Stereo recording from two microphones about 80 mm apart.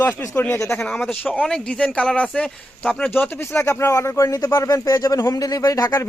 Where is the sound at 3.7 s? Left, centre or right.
Left.